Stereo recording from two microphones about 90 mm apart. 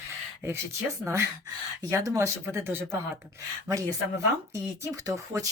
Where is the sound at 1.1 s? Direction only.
30° right (ahead or behind).